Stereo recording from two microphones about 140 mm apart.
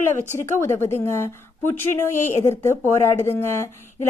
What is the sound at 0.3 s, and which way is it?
A woman's voice, 20° left (ahead or behind).